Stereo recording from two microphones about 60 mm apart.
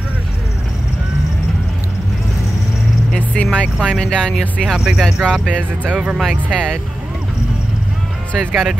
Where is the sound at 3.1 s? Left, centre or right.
Centre.